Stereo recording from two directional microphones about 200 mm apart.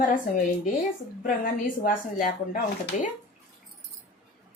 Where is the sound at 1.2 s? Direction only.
45° left (ahead or behind).